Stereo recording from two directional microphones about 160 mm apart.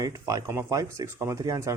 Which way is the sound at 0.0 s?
20° right (ahead or behind).